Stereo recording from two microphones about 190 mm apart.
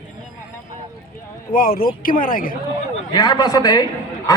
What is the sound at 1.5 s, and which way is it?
A man's voice, 50° left (ahead or behind).